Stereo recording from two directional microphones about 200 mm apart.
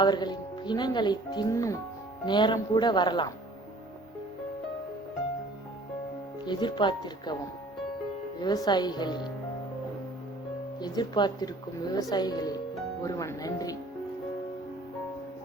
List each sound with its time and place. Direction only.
0.0 s speech: 20° left (ahead or behind)
6.4 s speech: 20° left (ahead or behind)
8.4 s speech: 20° left (ahead or behind)
10.8 s speech: 20° left (ahead or behind)